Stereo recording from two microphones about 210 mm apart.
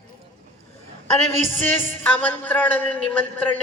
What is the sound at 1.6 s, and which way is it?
A man's voice, 10° left (ahead or behind).